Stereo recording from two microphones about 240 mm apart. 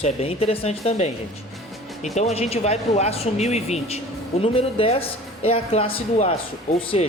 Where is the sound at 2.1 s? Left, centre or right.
Left.